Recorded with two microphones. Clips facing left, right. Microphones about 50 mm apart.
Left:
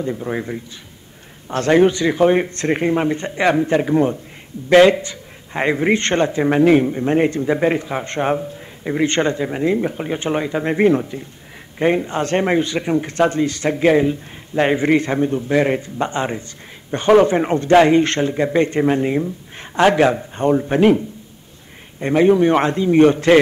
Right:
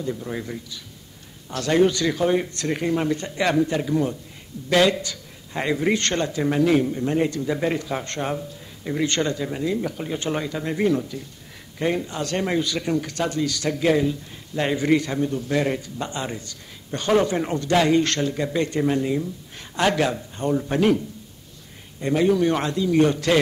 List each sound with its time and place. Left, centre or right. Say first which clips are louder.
0.0 s a man's voice: left 6 dB; left
22.0 s a man's voice: left 6 dB; left